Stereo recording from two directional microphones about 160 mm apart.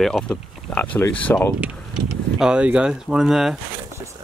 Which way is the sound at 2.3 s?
5° right (ahead or behind).